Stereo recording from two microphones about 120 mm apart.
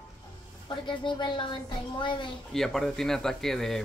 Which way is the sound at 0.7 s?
40° left (ahead or behind).